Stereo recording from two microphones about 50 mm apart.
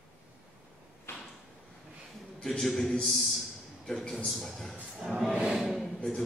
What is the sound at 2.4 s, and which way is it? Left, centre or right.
Speech, centre.